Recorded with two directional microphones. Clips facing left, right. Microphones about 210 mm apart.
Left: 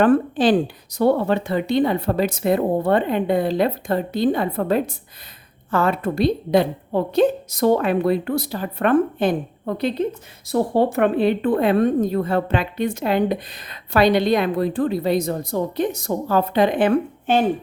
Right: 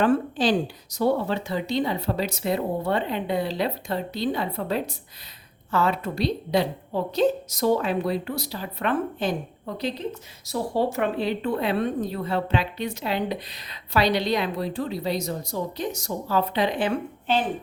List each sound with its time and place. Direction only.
0.0 s a woman's voice: 55° left (ahead or behind)